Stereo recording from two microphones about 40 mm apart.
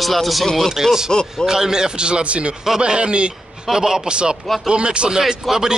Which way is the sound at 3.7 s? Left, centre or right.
Centre.